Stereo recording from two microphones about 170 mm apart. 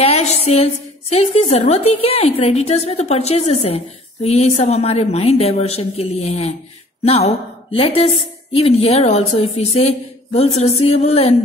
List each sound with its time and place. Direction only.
0.0 s a sound: 40° left (ahead or behind)
1.1 s a woman's voice: 40° left (ahead or behind)
7.7 s a woman's voice: 35° left (ahead or behind)